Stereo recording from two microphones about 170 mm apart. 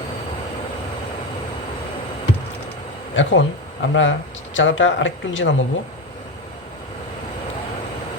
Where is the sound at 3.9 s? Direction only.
90° left.